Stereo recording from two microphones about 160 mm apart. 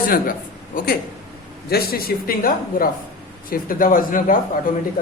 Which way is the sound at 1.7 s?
70° left (ahead or behind).